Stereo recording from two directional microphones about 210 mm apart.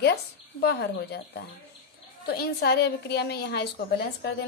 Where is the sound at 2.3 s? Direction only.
50° left (ahead or behind).